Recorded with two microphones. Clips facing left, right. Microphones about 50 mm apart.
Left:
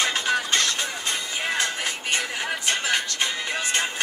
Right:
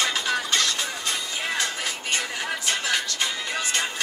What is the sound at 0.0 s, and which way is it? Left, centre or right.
Music, centre.